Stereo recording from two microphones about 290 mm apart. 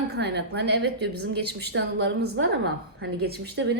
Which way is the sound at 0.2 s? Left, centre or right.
Right.